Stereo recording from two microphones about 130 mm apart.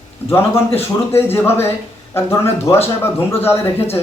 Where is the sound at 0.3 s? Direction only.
20° left (ahead or behind).